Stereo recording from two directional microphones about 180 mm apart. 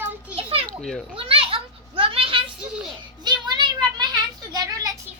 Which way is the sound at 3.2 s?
25° right (ahead or behind).